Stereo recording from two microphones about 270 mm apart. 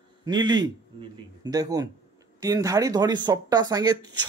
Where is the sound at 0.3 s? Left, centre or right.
Centre.